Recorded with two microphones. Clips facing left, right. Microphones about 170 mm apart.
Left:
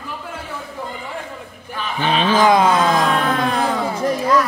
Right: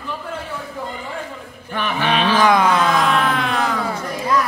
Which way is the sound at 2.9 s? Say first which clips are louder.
Even; 40° left (ahead or behind).